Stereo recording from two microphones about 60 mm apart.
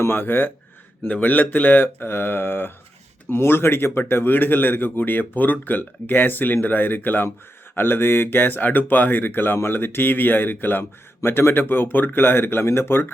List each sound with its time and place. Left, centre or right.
0.0 s speech: left